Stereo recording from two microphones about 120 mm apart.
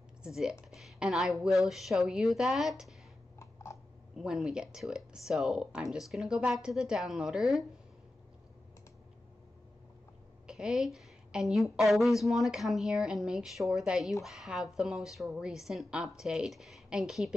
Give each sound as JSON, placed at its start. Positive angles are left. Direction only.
{"t": 0.2, "sound": "a woman's voice", "side_deg": -5}
{"t": 3.3, "sound": "a sound", "side_deg": 25}
{"t": 4.2, "sound": "a woman's voice", "side_deg": -5}
{"t": 10.4, "sound": "a woman's voice", "side_deg": -5}